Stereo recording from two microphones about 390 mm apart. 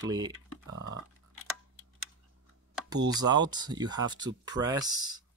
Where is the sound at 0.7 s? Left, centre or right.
Right.